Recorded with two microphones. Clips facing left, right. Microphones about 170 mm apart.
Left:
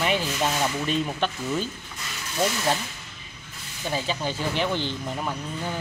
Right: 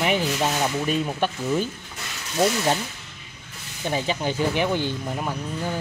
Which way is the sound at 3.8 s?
15° right (ahead or behind).